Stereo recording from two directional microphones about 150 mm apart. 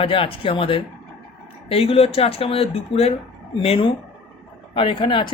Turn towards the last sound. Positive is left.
turn(degrees=35)  # may be behind; listen again after turning